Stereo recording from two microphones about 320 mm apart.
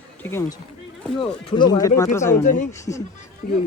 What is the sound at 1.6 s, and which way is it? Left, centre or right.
Speech, centre.